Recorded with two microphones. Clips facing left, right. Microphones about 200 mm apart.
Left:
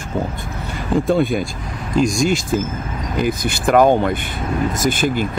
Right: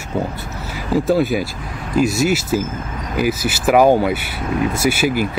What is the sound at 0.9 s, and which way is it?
Speech, 5° right (ahead or behind).